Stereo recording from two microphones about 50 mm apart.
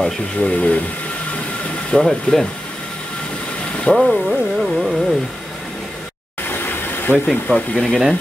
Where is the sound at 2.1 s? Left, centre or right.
Centre.